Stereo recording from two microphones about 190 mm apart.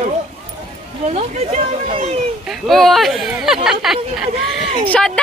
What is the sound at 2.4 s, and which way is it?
Speech, centre (ahead or behind).